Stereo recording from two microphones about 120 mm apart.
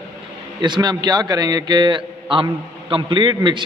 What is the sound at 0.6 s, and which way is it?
A man's voice, 35° right (ahead or behind).